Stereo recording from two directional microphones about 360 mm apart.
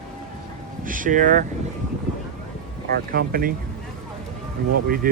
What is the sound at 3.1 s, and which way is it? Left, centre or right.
Speech, right.